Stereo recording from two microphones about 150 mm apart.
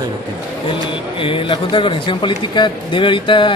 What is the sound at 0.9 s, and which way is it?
A man's voice, 35° left (ahead or behind).